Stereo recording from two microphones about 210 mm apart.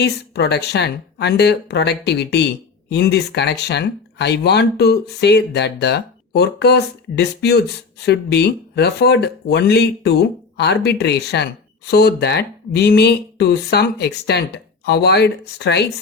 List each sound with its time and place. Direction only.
0.0 s speech: 50° left (ahead or behind)